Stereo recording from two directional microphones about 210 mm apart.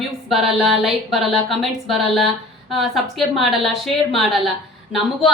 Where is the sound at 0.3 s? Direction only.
Centre (ahead or behind).